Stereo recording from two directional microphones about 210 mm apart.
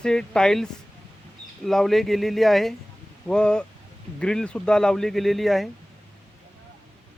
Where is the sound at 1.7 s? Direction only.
Centre (ahead or behind).